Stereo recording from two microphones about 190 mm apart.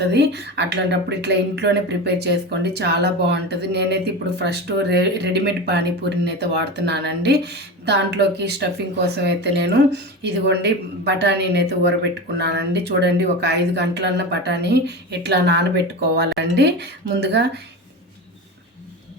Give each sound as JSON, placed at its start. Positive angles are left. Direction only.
{"t": 0.0, "sound": "a woman's voice", "side_deg": -60}